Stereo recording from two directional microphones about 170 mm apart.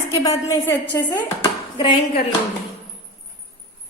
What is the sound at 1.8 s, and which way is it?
Speech, 30° left (ahead or behind).